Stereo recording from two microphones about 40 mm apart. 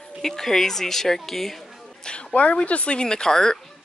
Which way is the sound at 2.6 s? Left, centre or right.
Left.